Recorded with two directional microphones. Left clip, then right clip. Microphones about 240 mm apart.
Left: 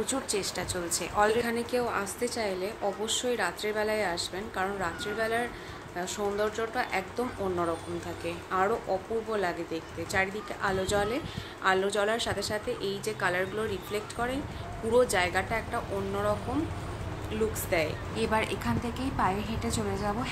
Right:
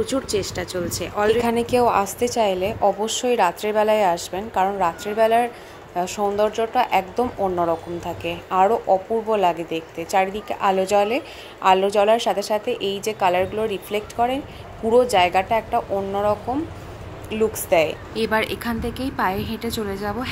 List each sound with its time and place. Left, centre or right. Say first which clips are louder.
0.0 s speech: right 8 dB; centre
1.4 s a woman's voice: right 11 dB; right
17.6 s a woman's voice: right 11 dB; right